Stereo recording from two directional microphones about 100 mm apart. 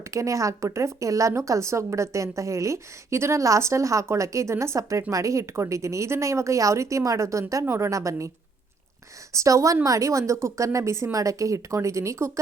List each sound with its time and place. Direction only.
0.0 s speech: 30° right (ahead or behind)
9.3 s speech: 30° right (ahead or behind)